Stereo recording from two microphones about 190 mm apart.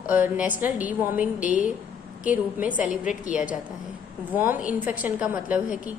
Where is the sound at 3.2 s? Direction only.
45° left (ahead or behind).